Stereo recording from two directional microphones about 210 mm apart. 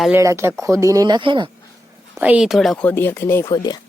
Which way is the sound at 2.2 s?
5° right (ahead or behind).